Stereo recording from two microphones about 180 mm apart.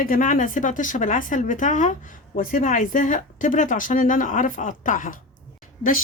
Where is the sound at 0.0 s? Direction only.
50° left (ahead or behind).